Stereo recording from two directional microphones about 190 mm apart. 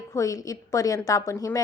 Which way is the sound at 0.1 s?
15° left (ahead or behind).